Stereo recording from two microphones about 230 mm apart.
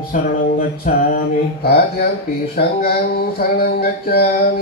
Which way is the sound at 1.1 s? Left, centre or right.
Left.